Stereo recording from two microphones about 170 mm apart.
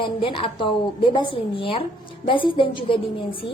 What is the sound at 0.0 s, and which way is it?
A woman's voice, 30° left (ahead or behind).